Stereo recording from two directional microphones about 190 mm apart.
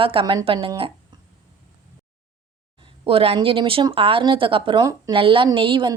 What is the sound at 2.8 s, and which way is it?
A woman's voice, 25° right (ahead or behind).